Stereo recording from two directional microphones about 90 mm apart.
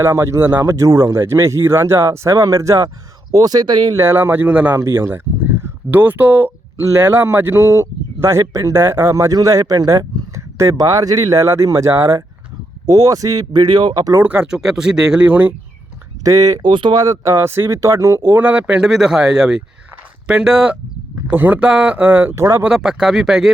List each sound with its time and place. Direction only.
0.0 s speech: 30° right (ahead or behind)
3.3 s speech: 45° right (ahead or behind)
3.9 s speech: 25° right (ahead or behind)
6.8 s speech: 30° right (ahead or behind); by 14.1 s 50° right (ahead or behind)
14.2 s speech: 15° right (ahead or behind)
16.2 s speech: 35° right (ahead or behind)
16.6 s speech: 60° right (ahead or behind)
17.0 s speech: 35° right (ahead or behind); by 22.4 s 15° right (ahead or behind)
22.4 s speech: 30° right (ahead or behind)
22.6 s speech: 5° right (ahead or behind)